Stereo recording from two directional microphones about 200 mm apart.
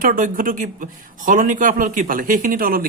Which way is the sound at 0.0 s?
45° right (ahead or behind).